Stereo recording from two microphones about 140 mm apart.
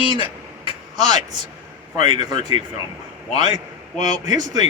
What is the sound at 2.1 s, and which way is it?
Speech, 35° right (ahead or behind).